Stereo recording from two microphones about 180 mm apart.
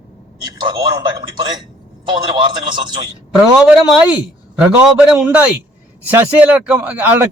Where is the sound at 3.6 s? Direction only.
5° right (ahead or behind).